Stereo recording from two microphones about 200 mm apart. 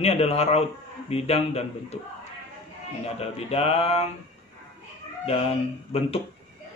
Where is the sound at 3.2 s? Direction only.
30° left (ahead or behind).